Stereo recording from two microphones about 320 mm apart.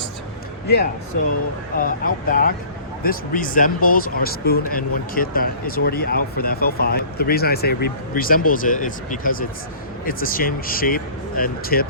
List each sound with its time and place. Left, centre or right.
1.7 s speech: left